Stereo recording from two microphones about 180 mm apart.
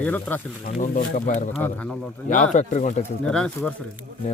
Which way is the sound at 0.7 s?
50° left (ahead or behind).